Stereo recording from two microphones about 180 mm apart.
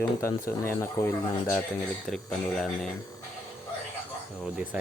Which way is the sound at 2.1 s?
5° left (ahead or behind).